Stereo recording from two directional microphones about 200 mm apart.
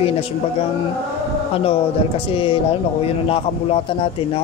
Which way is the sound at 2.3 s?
25° left (ahead or behind).